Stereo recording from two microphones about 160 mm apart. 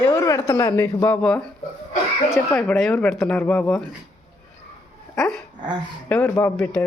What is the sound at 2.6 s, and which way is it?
Speech, centre (ahead or behind).